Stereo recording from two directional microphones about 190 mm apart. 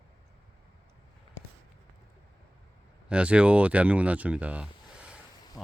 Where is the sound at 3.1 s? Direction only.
5° right (ahead or behind).